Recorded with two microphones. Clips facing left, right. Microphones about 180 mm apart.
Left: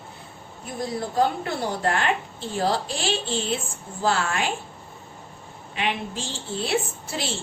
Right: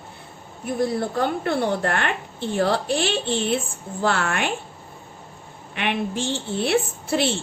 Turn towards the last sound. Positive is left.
turn(degrees=-60)  # may be behind; listen again after turning